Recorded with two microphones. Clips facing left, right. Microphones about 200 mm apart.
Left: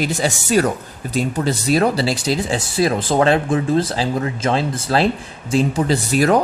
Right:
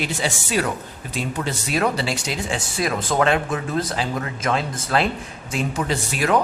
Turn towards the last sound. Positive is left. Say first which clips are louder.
# left 6 dB
turn(degrees=40)  # may be behind; listen again after turning